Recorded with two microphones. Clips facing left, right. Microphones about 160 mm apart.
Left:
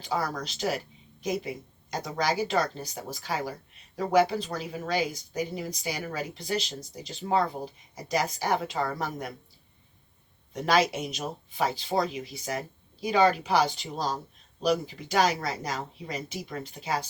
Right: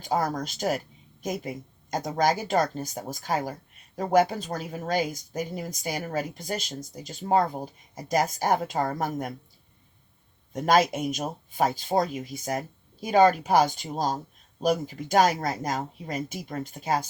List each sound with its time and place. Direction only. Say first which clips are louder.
0.0 s speech: right 4 dB; 45° right (ahead or behind)
10.5 s speech: right 3 dB; 50° right (ahead or behind)